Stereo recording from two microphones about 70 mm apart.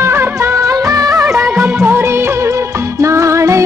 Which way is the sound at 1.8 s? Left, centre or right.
Right.